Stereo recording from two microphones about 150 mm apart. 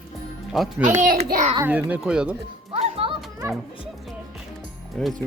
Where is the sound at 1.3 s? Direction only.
60° right (ahead or behind).